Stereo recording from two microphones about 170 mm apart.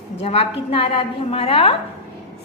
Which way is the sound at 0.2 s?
35° left (ahead or behind).